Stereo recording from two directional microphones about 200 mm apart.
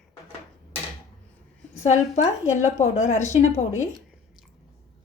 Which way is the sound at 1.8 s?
35° left (ahead or behind).